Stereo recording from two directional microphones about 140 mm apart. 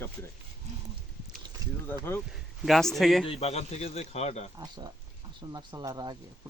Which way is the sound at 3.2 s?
45° left (ahead or behind).